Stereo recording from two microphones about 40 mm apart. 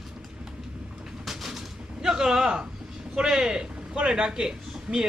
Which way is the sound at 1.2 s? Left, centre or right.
Centre.